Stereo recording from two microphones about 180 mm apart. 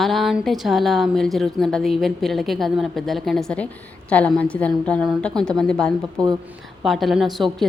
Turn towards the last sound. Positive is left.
turn(degrees=0)  # may be behind; listen again after turning